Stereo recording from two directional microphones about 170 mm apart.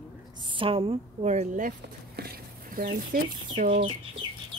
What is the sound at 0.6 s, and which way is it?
Speech, 30° right (ahead or behind).